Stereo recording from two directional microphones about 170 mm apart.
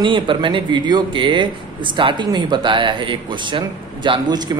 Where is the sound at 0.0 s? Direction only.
30° right (ahead or behind).